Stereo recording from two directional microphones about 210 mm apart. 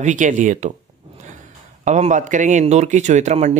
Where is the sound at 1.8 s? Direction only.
35° right (ahead or behind).